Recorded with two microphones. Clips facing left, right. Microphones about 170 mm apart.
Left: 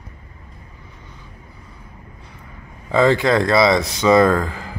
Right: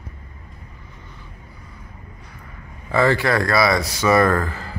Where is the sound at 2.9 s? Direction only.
20° left (ahead or behind).